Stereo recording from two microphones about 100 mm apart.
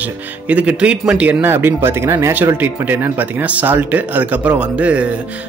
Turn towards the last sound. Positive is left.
turn(degrees=-15)  # may be behind; listen again after turning